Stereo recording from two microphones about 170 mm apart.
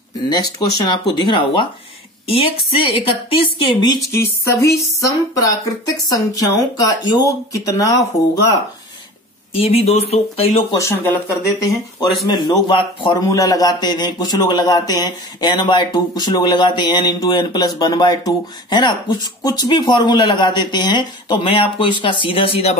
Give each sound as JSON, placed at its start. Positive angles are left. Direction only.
{"t": 0.3, "sound": "a man's voice", "side_deg": 25}
{"t": 2.9, "sound": "a man's voice", "side_deg": 30}
{"t": 9.5, "sound": "speech", "side_deg": 35}
{"t": 10.8, "sound": "a man's voice", "side_deg": 15}